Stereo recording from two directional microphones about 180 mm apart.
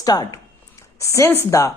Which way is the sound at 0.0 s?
20° left (ahead or behind).